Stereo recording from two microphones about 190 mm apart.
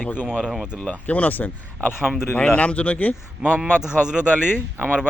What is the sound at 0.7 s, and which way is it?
Speech, 10° left (ahead or behind).